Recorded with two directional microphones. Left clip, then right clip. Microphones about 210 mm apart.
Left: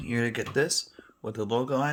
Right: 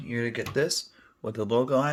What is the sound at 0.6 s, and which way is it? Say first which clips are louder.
Speech: even; centre (ahead or behind).